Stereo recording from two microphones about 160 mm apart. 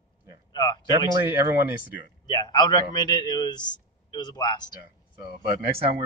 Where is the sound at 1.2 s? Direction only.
15° right (ahead or behind).